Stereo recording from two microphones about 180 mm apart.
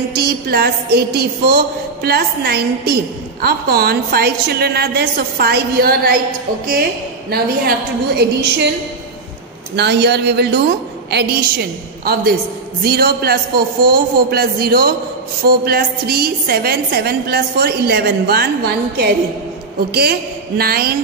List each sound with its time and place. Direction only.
0.1 s a woman's voice: 60° right (ahead or behind)
9.8 s a woman's voice: 70° right (ahead or behind)